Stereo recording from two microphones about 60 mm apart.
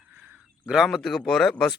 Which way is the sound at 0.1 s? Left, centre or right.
Right.